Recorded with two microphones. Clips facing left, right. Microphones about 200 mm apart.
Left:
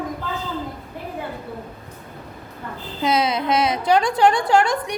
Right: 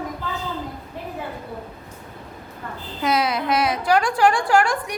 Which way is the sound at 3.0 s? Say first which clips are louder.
Left 1 dB; 20° left (ahead or behind).